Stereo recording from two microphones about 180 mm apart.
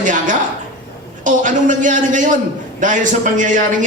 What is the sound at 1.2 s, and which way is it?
A man's voice, 45° right (ahead or behind).